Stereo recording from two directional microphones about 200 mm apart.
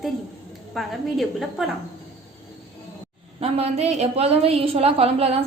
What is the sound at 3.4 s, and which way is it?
A woman's voice, 30° right (ahead or behind).